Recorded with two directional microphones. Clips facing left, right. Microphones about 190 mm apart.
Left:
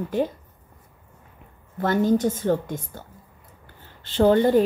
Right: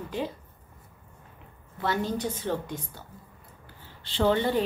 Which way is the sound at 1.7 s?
45° left (ahead or behind).